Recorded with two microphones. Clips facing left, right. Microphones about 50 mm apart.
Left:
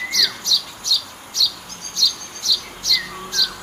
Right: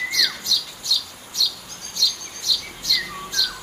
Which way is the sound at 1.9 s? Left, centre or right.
Centre.